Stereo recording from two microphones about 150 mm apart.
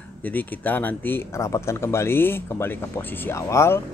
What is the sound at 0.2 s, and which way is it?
Speech, 10° left (ahead or behind).